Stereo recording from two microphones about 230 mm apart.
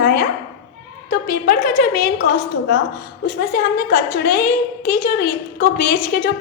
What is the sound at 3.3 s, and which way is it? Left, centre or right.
A woman's voice, left.